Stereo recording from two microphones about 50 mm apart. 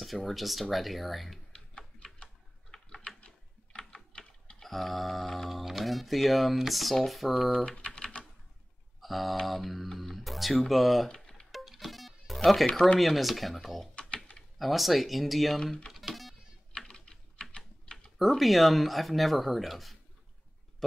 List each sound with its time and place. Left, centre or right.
0.0 s speech: centre
1.5 s tick-tock: centre
2.7 s typing: centre
7.7 s typing: left
9.0 s speech: centre
11.1 s typing: centre
11.5 s music: centre
13.0 s speech: centre
13.9 s typing: left
14.3 s speech: centre
15.6 s speech: centre
15.9 s music: centre
16.7 s typing: centre
18.2 s speech: centre